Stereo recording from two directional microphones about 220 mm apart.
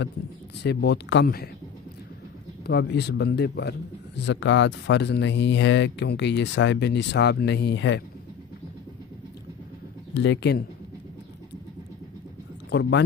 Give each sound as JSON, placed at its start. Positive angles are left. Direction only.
{"t": 0.7, "sound": "speech", "side_deg": 50}
{"t": 2.6, "sound": "speech", "side_deg": 50}
{"t": 10.1, "sound": "speech", "side_deg": 55}
{"t": 12.6, "sound": "speech", "side_deg": 50}